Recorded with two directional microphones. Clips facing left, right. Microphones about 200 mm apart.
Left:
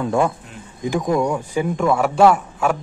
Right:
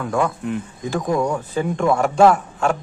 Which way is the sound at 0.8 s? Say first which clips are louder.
Left 2 dB; 10° left (ahead or behind).